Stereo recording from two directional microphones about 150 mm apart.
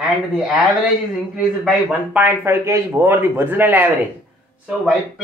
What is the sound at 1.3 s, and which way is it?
Speech, 5° right (ahead or behind).